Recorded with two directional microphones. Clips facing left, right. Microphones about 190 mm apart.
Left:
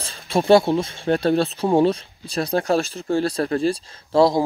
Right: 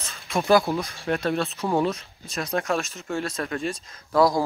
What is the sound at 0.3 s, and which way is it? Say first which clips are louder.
Speech: left 5 dB; 30° left (ahead or behind).